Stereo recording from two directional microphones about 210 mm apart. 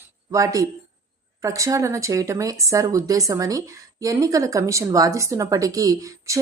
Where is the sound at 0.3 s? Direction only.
15° right (ahead or behind).